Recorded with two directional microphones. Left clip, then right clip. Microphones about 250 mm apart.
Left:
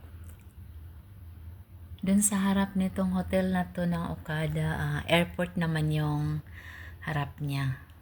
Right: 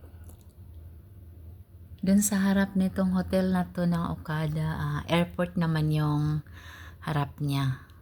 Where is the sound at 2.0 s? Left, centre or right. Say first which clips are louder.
Right 2 dB; centre.